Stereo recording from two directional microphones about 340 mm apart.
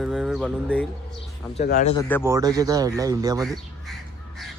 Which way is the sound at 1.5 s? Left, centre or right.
Left.